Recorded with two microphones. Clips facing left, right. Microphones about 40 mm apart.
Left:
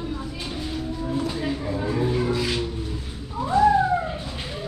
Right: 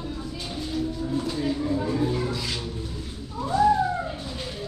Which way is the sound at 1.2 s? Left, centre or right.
Left.